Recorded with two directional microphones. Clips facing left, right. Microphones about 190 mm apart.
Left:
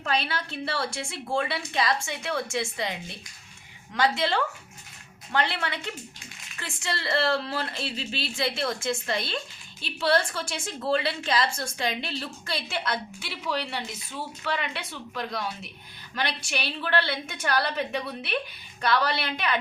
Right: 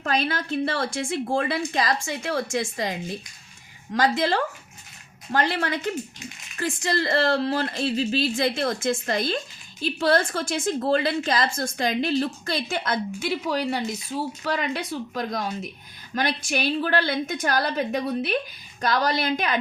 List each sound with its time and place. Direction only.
0.0 s a woman's voice: 45° right (ahead or behind)
4.2 s a woman's voice: 40° right (ahead or behind)